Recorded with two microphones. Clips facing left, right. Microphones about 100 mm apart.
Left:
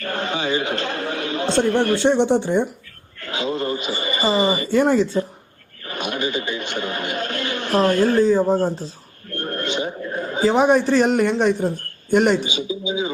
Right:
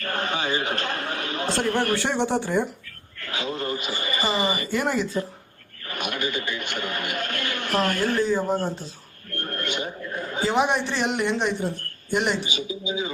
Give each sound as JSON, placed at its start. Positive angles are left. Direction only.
{"t": 0.2, "sound": "a man's voice", "side_deg": 20}
{"t": 3.2, "sound": "a sound", "side_deg": 25}
{"t": 10.4, "sound": "a woman's voice", "side_deg": 40}
{"t": 12.5, "sound": "speech", "side_deg": 20}